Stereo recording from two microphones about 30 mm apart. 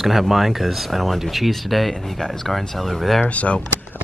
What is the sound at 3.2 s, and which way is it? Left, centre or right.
Speech, left.